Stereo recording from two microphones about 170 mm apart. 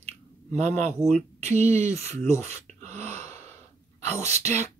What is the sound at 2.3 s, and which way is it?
Speech, 15° left (ahead or behind).